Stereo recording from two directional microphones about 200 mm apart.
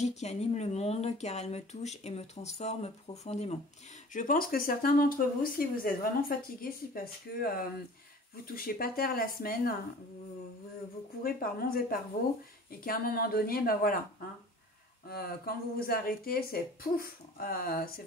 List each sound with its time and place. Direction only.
0.0 s speech: 35° left (ahead or behind)
8.5 s speech: 45° left (ahead or behind)
11.2 s speech: 45° left (ahead or behind)
15.0 s speech: 50° left (ahead or behind)